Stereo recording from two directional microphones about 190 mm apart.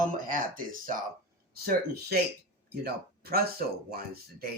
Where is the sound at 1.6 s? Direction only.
55° right (ahead or behind).